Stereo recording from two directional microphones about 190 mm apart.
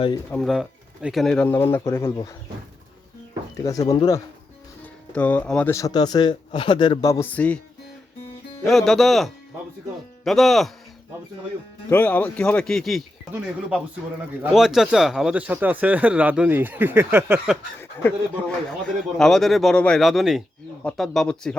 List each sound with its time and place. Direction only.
0.3 s a man's voice: centre (ahead or behind)
3.6 s a man's voice: 15° left (ahead or behind)
5.1 s a man's voice: 5° left (ahead or behind)
8.6 s speech: centre (ahead or behind)
11.9 s speech: 10° left (ahead or behind); by 17.6 s 5° right (ahead or behind)
17.7 s a man's voice: 10° left (ahead or behind)